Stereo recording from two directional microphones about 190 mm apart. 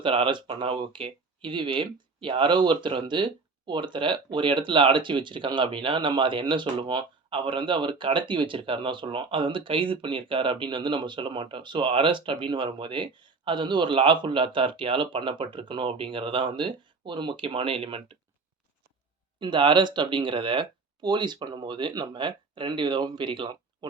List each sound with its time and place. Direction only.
0.0 s speech: 25° right (ahead or behind)
19.4 s speech: 25° right (ahead or behind)